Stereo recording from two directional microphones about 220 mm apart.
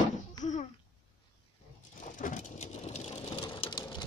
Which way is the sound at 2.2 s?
35° left (ahead or behind).